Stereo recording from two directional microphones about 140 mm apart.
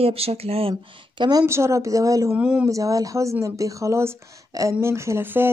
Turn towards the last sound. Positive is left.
turn(degrees=-15)  # may be behind; listen again after turning